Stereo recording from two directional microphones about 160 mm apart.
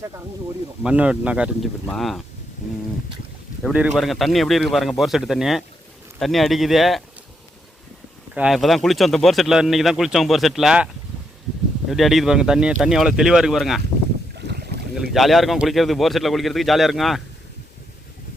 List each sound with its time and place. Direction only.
0.8 s speech: 5° right (ahead or behind)
3.6 s speech: 5° right (ahead or behind)
8.4 s speech: centre (ahead or behind)
11.9 s speech: centre (ahead or behind)
14.3 s boat: 85° right
14.9 s speech: centre (ahead or behind)